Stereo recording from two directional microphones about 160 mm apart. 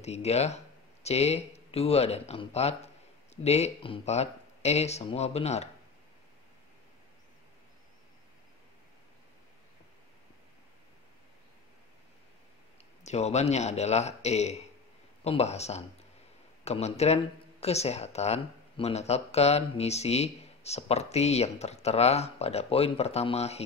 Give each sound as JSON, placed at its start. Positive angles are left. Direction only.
{"t": 0.0, "sound": "speech", "side_deg": 40}
{"t": 13.0, "sound": "speech", "side_deg": 45}